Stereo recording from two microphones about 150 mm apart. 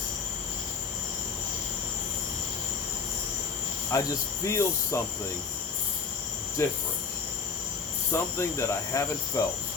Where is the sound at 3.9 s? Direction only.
20° left (ahead or behind).